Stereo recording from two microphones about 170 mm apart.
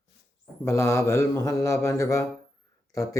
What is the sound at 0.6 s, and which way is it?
A man's voice, 15° left (ahead or behind).